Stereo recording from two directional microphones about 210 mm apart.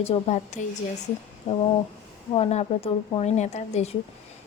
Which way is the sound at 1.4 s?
30° left (ahead or behind).